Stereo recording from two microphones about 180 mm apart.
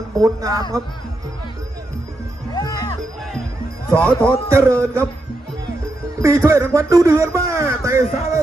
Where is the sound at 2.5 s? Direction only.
20° left (ahead or behind).